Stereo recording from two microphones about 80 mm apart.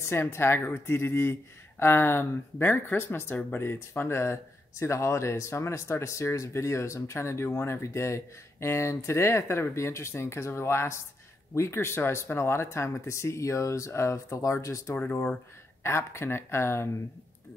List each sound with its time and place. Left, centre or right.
0.0 s speech: left